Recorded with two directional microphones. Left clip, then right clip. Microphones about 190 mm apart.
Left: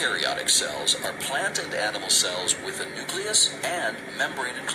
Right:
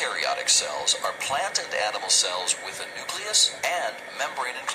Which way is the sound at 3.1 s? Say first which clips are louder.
Right 1 dB; centre (ahead or behind).